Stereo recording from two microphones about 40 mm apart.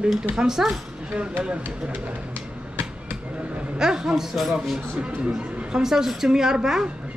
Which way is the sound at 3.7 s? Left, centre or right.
Centre.